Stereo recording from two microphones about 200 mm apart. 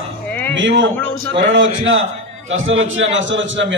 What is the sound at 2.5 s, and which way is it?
A man's voice, 75° right (ahead or behind).